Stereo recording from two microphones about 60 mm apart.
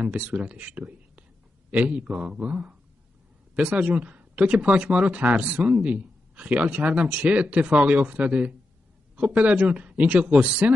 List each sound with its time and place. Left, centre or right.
0.0 s speech: right